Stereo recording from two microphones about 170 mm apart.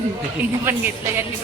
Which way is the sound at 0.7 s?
15° right (ahead or behind).